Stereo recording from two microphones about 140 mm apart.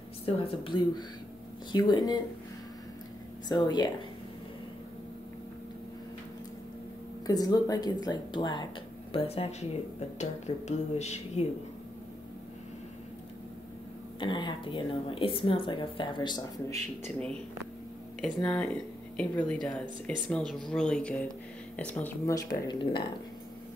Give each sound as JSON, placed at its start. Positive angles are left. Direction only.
{"t": 0.2, "sound": "a woman's voice", "side_deg": 40}
{"t": 3.4, "sound": "speech", "side_deg": 30}
{"t": 7.2, "sound": "speech", "side_deg": 30}
{"t": 9.1, "sound": "speech", "side_deg": 45}
{"t": 14.2, "sound": "a woman's voice", "side_deg": 35}
{"t": 18.2, "sound": "speech", "side_deg": 10}
{"t": 22.2, "sound": "a woman's voice", "side_deg": 30}